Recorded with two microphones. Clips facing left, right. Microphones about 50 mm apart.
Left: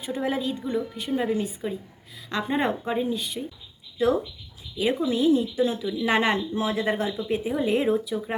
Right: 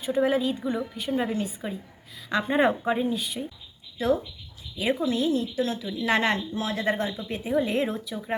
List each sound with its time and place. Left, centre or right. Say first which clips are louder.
0.0 s speech: right 4 dB; centre
4.8 s a woman's voice: left 2 dB; centre
6.5 s speech: left 3 dB; left
6.7 s speech: left 1 dB; centre